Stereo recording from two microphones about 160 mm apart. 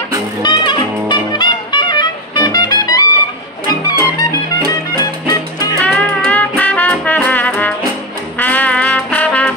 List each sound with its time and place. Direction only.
0.4 s music: 30° left (ahead or behind)
4.2 s music: 20° left (ahead or behind)
5.9 s music: 5° left (ahead or behind)